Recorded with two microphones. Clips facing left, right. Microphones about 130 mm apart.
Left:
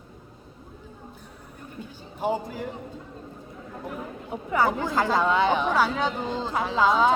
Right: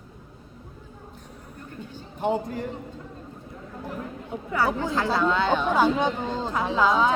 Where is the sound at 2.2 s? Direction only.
5° left (ahead or behind).